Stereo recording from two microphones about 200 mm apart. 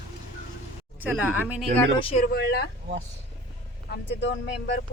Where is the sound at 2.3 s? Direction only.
55° left (ahead or behind).